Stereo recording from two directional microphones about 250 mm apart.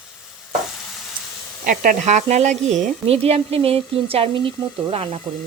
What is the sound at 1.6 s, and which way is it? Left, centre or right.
Speech, right.